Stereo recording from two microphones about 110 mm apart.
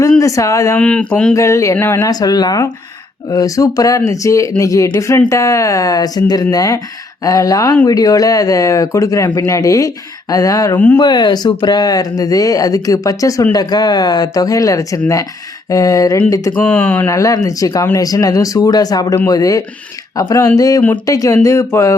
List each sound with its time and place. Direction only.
0.2 s speech: 30° left (ahead or behind)
0.8 s speech: 10° left (ahead or behind)
1.4 s speech: 30° left (ahead or behind)
2.0 s speech: 35° left (ahead or behind)
10.8 s speech: 15° left (ahead or behind)
11.0 s speech: 40° left (ahead or behind)
16.6 s speech: 10° left (ahead or behind)
17.1 s speech: 30° left (ahead or behind)